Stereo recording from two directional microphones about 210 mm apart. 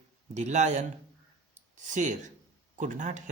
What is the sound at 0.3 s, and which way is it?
Speech, 35° right (ahead or behind).